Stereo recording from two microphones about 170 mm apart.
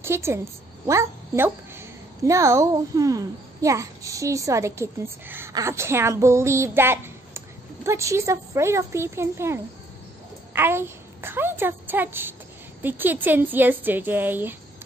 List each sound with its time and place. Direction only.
0.0 s a woman's voice: 15° right (ahead or behind)